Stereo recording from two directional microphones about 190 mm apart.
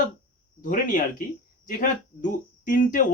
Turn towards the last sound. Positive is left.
turn(degrees=45)  # may be behind; listen again after turning